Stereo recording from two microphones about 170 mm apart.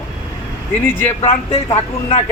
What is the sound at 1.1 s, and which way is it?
Speech, 35° left (ahead or behind).